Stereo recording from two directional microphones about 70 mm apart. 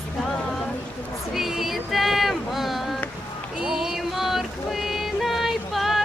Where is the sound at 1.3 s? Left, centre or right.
Centre.